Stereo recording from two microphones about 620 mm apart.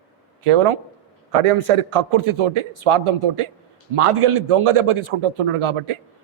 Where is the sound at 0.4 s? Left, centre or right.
Right.